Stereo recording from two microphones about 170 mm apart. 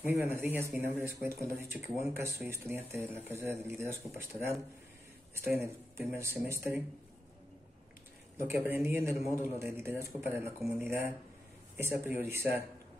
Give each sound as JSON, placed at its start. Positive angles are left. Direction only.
{"t": 0.0, "sound": "speech", "side_deg": -10}
{"t": 5.3, "sound": "speech", "side_deg": -15}
{"t": 8.5, "sound": "speech", "side_deg": -15}